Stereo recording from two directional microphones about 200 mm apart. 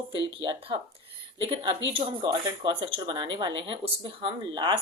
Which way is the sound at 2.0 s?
20° right (ahead or behind).